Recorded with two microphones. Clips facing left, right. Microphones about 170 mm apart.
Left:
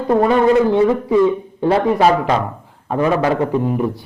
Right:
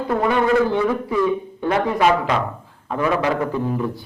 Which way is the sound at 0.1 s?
35° left (ahead or behind).